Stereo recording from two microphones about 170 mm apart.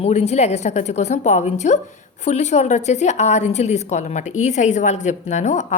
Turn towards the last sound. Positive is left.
turn(degrees=45)  # may be behind; listen again after turning